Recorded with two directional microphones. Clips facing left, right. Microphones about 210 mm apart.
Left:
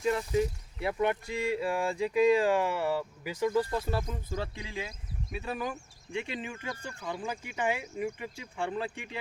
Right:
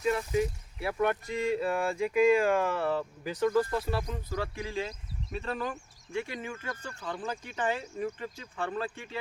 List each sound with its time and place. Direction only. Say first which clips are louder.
0.1 s speech: even; 25° left (ahead or behind); by 3.5 s 10° left (ahead or behind)
3.5 s speech: right 1 dB; 20° left (ahead or behind)